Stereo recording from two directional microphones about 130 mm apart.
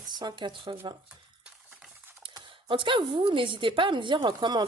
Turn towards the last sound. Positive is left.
turn(degrees=-35)  # may be behind; listen again after turning